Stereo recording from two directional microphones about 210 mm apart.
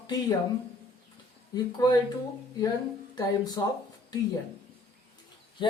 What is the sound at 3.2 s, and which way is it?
Speech, 20° left (ahead or behind).